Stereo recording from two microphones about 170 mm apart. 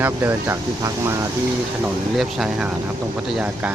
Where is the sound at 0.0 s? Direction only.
15° right (ahead or behind).